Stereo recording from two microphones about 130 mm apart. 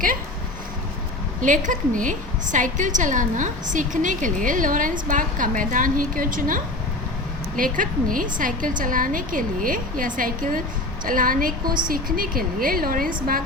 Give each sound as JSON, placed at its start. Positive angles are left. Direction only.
{"t": 1.4, "sound": "a woman's voice", "side_deg": -80}